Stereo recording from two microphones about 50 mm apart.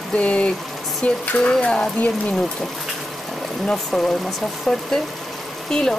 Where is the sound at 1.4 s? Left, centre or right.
Centre.